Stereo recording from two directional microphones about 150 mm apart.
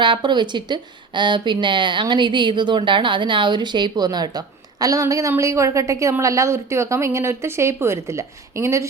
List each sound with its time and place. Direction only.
0.0 s speech: 30° right (ahead or behind)